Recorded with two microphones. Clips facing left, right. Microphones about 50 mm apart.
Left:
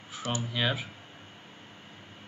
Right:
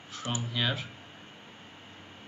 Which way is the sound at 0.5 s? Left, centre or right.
Centre.